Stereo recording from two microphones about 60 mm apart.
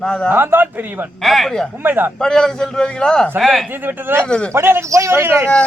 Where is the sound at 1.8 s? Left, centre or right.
Right.